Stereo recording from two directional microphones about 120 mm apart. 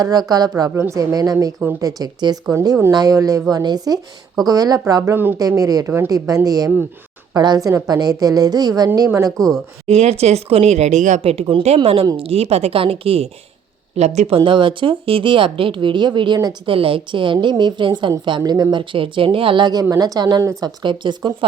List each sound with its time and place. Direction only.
0.0 s a woman's voice: 35° right (ahead or behind)
2.9 s a woman's voice: 30° right (ahead or behind)
5.1 s speech: 15° right (ahead or behind)
5.4 s a woman's voice: 30° right (ahead or behind)
9.9 s speech: 60° right (ahead or behind)
13.9 s speech: 65° right (ahead or behind); by 21.3 s 40° right (ahead or behind)